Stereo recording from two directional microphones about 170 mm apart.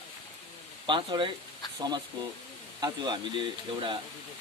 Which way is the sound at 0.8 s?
30° right (ahead or behind).